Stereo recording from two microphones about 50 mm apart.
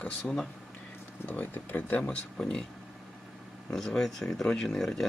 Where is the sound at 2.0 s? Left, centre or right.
Centre.